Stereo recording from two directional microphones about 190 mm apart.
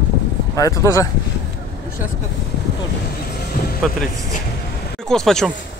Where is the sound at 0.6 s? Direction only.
15° left (ahead or behind).